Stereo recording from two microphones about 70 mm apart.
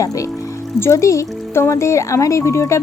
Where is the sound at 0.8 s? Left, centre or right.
Left.